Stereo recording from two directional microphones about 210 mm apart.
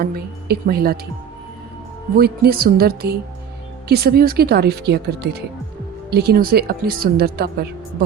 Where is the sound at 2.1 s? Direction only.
45° right (ahead or behind).